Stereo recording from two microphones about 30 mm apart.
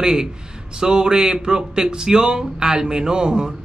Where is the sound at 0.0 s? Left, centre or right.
Right.